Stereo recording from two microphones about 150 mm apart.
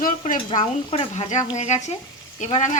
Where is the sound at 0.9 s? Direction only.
40° left (ahead or behind).